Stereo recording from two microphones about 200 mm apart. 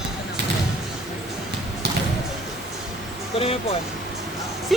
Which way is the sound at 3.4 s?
30° left (ahead or behind).